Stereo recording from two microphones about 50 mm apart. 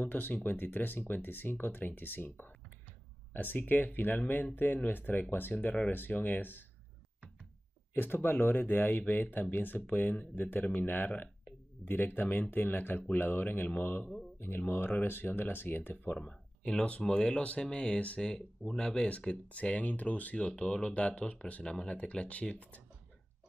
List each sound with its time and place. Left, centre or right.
0.0 s speech: left
7.9 s speech: left
17.1 s speech: left
18.6 s speech: centre
19.0 s speech: left